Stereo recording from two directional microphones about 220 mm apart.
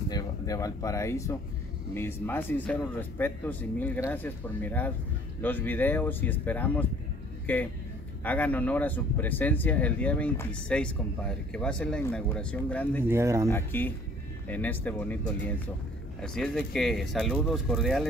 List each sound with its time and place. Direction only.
0.1 s speech: 15° left (ahead or behind)
13.1 s speech: 10° right (ahead or behind)
13.5 s speech: 10° left (ahead or behind)